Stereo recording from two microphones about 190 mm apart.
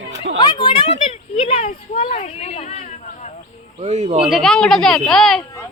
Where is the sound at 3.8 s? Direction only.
40° right (ahead or behind).